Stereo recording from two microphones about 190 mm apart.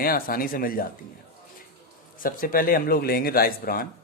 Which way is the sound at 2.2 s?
45° left (ahead or behind).